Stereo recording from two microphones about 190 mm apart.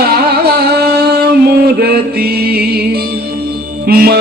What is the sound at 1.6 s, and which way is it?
Music, 55° right (ahead or behind).